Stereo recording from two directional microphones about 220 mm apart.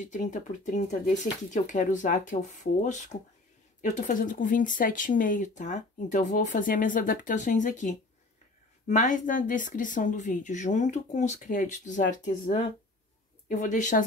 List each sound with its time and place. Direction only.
0.0 s speech: 35° left (ahead or behind)